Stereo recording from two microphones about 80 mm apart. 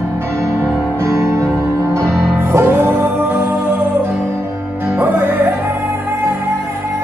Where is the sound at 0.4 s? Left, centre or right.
Right.